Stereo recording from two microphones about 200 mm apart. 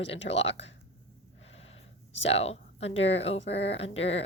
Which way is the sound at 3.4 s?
60° left (ahead or behind).